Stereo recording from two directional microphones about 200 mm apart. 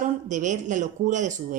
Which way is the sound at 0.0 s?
40° right (ahead or behind).